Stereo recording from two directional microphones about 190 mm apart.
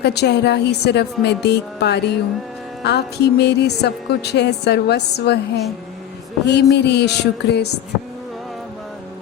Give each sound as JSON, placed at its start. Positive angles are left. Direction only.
{"t": 0.0, "sound": "music", "side_deg": 60}
{"t": 6.4, "sound": "music", "side_deg": 60}